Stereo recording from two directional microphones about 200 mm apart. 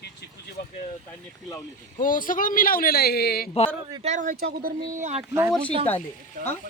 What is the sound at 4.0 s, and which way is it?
Speech, 35° right (ahead or behind).